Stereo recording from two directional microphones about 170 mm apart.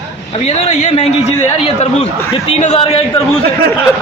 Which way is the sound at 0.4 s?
40° left (ahead or behind).